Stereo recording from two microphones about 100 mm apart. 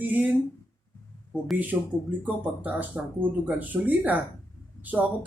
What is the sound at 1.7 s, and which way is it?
Speech, 15° right (ahead or behind).